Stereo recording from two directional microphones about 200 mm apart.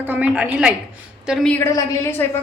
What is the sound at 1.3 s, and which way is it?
Speech, 5° left (ahead or behind).